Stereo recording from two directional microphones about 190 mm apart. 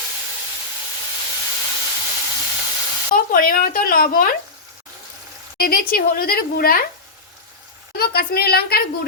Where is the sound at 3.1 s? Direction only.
50° left (ahead or behind).